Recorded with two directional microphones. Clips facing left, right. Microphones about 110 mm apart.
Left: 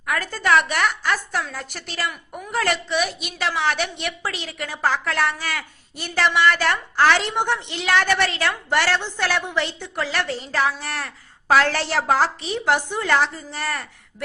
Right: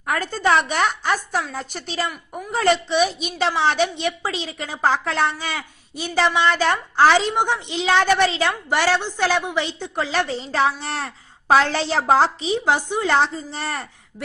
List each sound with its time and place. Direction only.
0.0 s a woman's voice: 25° right (ahead or behind)